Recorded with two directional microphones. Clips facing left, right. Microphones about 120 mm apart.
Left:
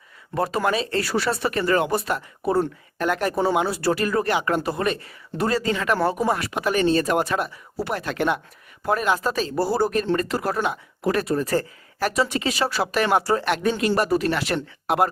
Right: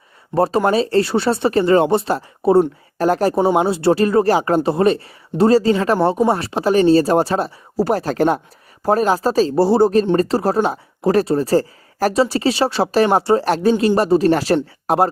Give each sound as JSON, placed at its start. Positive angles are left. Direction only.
{"t": 0.3, "sound": "speech", "side_deg": -30}